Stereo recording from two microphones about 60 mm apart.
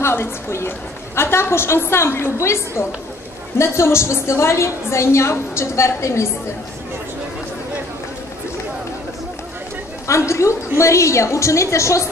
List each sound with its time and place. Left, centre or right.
0.0 s a woman's voice: left
10.0 s a woman's voice: left